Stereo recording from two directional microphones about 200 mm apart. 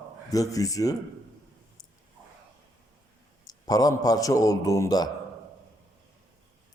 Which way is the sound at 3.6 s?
20° left (ahead or behind).